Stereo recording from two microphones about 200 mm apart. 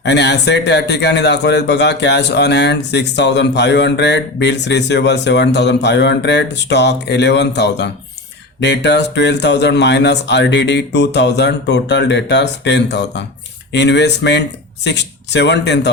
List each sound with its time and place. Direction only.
0.0 s a man's voice: 60° left (ahead or behind)